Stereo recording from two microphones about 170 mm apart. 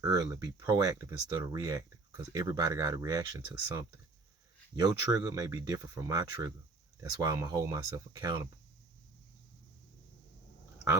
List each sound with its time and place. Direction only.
0.0 s speech: 20° right (ahead or behind)